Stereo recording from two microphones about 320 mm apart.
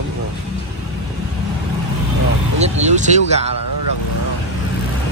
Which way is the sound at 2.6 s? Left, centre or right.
Right.